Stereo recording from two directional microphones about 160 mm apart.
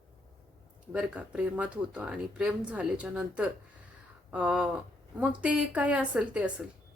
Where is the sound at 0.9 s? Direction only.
5° right (ahead or behind).